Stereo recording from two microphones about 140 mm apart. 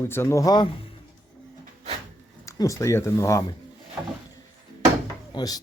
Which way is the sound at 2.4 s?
20° left (ahead or behind).